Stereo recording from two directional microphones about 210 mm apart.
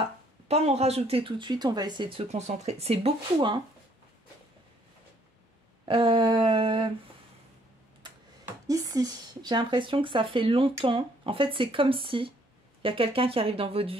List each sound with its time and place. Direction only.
0.0 s speech: 30° right (ahead or behind)
5.9 s speech: 25° right (ahead or behind)
8.6 s speech: 15° right (ahead or behind)